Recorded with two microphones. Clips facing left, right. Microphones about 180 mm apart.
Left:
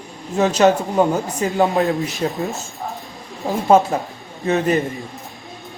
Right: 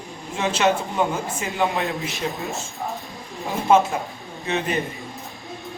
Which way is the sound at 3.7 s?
40° left (ahead or behind).